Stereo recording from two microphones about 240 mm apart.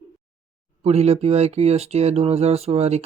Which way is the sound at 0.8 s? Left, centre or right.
Right.